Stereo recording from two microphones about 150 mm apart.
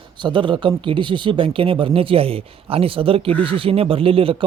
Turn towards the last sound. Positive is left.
turn(degrees=-35)  # may be behind; listen again after turning